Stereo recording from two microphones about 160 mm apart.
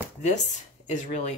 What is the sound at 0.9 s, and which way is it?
Speech, 45° left (ahead or behind).